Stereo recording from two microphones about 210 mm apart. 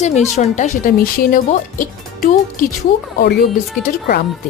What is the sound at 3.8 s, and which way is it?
Speech, 45° left (ahead or behind).